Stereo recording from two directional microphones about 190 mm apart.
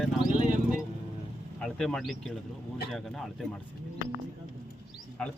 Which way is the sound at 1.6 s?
5° left (ahead or behind).